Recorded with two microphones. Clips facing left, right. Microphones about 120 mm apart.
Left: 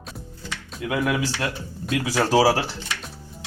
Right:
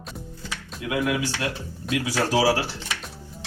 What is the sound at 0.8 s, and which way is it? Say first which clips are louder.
Speech: left 1 dB; 35° left (ahead or behind).